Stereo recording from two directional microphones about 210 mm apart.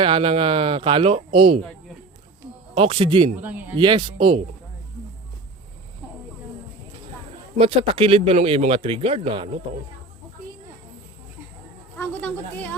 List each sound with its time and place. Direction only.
0.0 s speech: 25° right (ahead or behind)
2.7 s speech: 25° right (ahead or behind)
3.4 s speech: 5° right (ahead or behind)
3.8 s speech: 20° right (ahead or behind)
7.6 s speech: 25° right (ahead or behind)
11.9 s speech: 10° left (ahead or behind)